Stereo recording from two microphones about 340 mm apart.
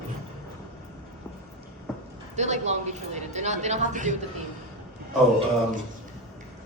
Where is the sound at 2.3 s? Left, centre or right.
Centre.